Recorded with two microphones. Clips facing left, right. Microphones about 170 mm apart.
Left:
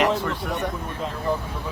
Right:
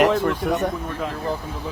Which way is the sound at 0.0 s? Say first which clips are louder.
Right 4 dB; 45° right (ahead or behind).